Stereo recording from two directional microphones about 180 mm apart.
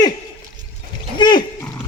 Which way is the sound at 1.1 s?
25° left (ahead or behind).